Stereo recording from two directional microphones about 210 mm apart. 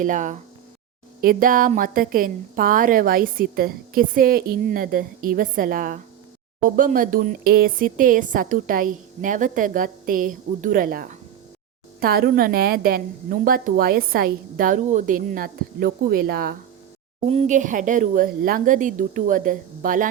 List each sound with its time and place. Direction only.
0.0 s a woman's voice: 35° right (ahead or behind)
17.2 s a woman's voice: 30° right (ahead or behind)